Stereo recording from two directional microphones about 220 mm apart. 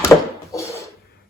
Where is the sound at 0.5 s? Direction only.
15° left (ahead or behind).